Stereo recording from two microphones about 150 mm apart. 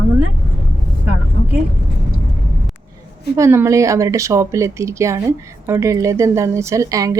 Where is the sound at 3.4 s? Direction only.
20° right (ahead or behind).